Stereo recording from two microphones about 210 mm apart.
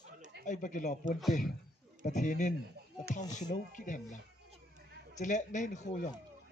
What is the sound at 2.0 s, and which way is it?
Speech, 35° left (ahead or behind).